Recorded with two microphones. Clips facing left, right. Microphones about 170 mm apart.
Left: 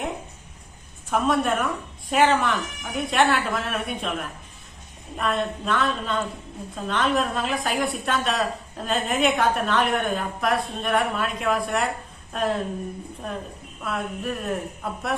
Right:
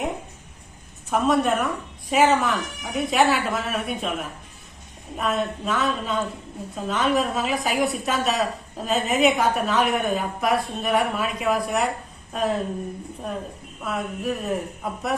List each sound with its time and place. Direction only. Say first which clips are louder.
1.1 s a woman's voice: right 2 dB; centre (ahead or behind)
13.8 s a woman's voice: right 2 dB; centre (ahead or behind)